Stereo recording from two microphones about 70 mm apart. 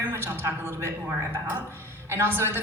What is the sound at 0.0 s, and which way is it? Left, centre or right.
A woman's voice, right.